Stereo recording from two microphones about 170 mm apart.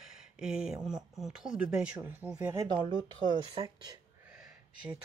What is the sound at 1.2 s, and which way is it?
Speech, 5° right (ahead or behind).